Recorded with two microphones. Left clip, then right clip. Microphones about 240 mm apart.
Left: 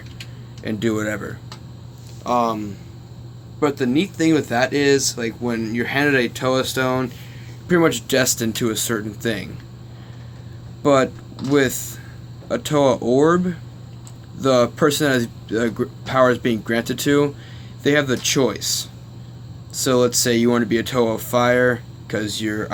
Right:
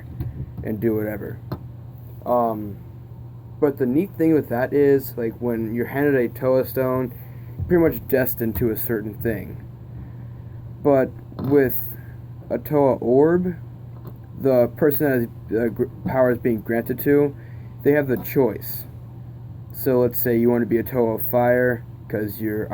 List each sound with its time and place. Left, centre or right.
0.6 s speech: left
3.6 s speech: left
10.8 s speech: left
12.5 s speech: left
19.8 s speech: left